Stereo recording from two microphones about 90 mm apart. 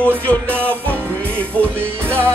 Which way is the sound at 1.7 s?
25° right (ahead or behind).